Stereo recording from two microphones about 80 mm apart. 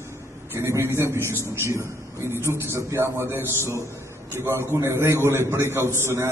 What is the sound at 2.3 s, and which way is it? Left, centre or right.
A man's voice, right.